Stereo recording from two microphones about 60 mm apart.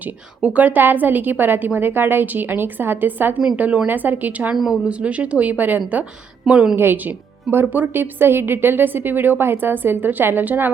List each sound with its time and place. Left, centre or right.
0.4 s a woman's voice: right
4.5 s a woman's voice: centre
4.9 s speech: right
6.4 s a woman's voice: centre
6.7 s a woman's voice: right